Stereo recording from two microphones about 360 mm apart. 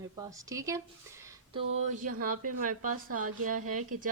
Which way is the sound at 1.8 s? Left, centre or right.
Right.